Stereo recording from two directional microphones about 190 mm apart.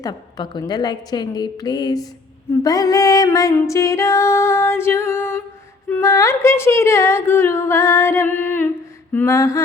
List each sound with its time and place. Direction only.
0.0 s a woman's voice: 20° left (ahead or behind)